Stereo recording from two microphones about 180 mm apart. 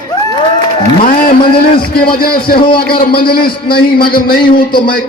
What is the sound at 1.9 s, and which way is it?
A man's voice, 55° left (ahead or behind).